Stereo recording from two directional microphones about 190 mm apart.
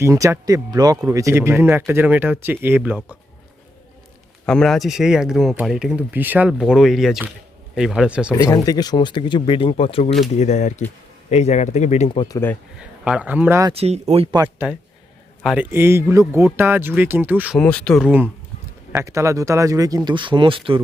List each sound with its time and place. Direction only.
0.0 s speech: 15° right (ahead or behind)
4.4 s speech: centre (ahead or behind)
8.3 s speech: 15° left (ahead or behind)
13.1 s speech: 5° right (ahead or behind)
13.7 s speech: 35° right (ahead or behind)
14.4 s speech: 10° right (ahead or behind)
17.6 s speech: 5° left (ahead or behind)
18.9 s speech: 15° right (ahead or behind)